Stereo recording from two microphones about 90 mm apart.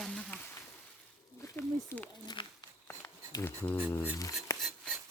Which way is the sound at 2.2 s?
50° left (ahead or behind).